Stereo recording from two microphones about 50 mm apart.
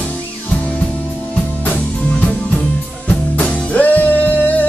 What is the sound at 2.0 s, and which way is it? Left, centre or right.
Music, left.